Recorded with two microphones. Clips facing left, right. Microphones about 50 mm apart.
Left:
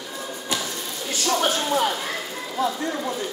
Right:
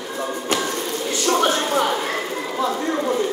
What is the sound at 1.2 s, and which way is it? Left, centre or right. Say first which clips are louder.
Speech: right 3 dB; right.